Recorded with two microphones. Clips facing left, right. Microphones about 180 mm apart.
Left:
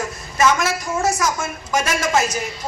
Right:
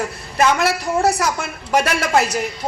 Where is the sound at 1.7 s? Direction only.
60° right (ahead or behind).